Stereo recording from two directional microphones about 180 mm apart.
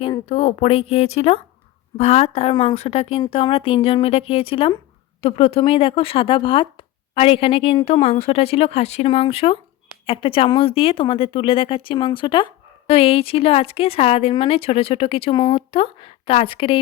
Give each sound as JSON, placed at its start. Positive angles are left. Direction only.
{"t": 0.0, "sound": "speech", "side_deg": 30}